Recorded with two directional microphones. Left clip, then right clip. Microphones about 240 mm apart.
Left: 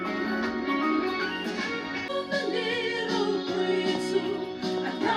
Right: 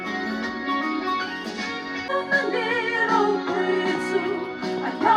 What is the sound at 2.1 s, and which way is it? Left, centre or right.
Music, right.